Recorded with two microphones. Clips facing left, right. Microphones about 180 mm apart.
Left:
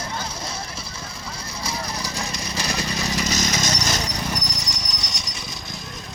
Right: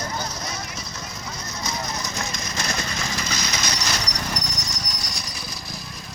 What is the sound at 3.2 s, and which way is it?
Vehicle, 45° left (ahead or behind).